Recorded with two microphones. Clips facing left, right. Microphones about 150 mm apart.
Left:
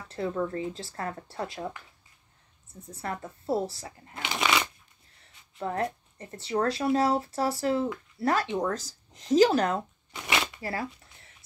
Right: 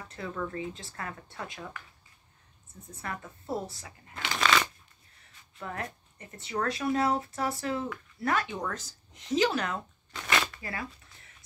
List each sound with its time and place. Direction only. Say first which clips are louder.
0.1 s speech: left 6 dB; 35° left (ahead or behind)
2.9 s speech: left 4 dB; 35° left (ahead or behind)
4.1 s shuffling cards: even; 15° left (ahead or behind)
5.6 s speech: left 8 dB; 30° left (ahead or behind)
10.1 s shuffling cards: even; 15° left (ahead or behind)
10.6 s speech: left 5 dB; 30° left (ahead or behind)